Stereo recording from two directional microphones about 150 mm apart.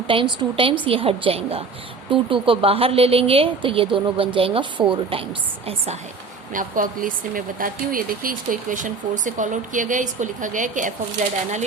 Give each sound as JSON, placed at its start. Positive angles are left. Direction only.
{"t": 0.1, "sound": "speech", "side_deg": -35}
{"t": 6.5, "sound": "speech", "side_deg": -65}